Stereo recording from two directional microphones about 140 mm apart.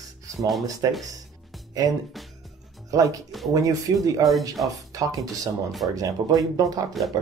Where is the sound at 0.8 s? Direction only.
25° right (ahead or behind).